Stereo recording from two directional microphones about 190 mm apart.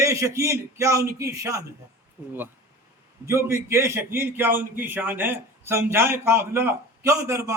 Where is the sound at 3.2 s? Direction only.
15° right (ahead or behind).